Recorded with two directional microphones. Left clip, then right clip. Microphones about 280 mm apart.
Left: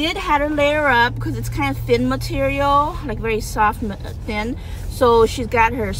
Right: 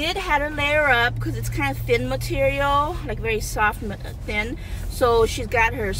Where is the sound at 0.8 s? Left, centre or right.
Centre.